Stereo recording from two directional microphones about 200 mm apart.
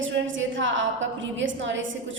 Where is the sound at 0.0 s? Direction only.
70° right (ahead or behind).